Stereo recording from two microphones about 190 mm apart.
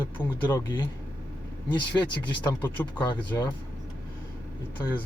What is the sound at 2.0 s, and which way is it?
Speech, 20° left (ahead or behind).